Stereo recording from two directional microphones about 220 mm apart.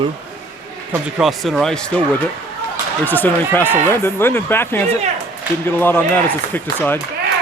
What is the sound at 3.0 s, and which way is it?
Speech, 10° left (ahead or behind).